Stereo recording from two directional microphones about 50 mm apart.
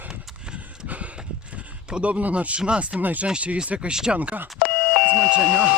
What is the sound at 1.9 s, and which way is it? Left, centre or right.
Speech, right.